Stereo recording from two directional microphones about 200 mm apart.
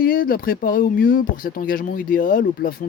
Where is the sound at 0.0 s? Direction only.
45° left (ahead or behind).